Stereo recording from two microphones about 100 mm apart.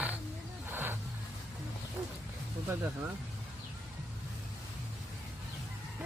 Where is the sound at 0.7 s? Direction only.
20° right (ahead or behind).